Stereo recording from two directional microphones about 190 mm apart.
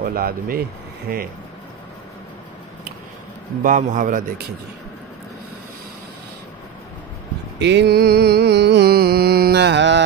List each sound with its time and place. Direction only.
0.0 s a man's voice: 50° right (ahead or behind)
3.6 s a man's voice: 45° right (ahead or behind)
7.5 s music: 65° right (ahead or behind)